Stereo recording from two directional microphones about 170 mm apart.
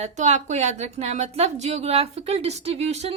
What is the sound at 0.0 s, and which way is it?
A woman's voice, 45° right (ahead or behind).